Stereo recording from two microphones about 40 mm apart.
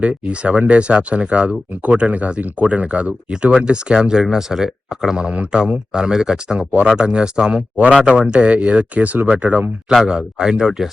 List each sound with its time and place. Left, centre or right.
0.0 s speech: right
5.2 s speech: right
10.1 s speech: centre